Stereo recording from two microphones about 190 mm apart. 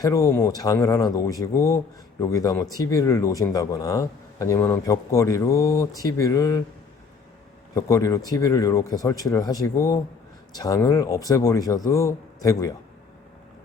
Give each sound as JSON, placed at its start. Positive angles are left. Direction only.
{"t": 0.0, "sound": "a man's voice", "side_deg": 15}
{"t": 7.8, "sound": "a man's voice", "side_deg": 15}